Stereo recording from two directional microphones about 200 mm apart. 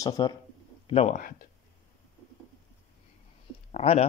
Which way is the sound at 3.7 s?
30° left (ahead or behind).